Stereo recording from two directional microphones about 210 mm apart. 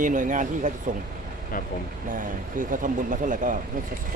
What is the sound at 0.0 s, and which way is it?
Speech, 40° right (ahead or behind).